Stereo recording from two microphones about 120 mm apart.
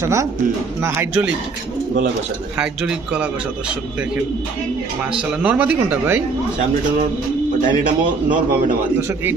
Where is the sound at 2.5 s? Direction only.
5° right (ahead or behind).